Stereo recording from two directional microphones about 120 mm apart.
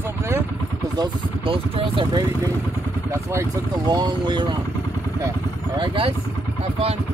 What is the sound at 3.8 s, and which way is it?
Speech, 40° right (ahead or behind).